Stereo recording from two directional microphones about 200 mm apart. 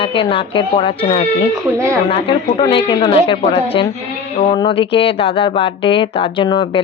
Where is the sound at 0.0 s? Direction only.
25° left (ahead or behind).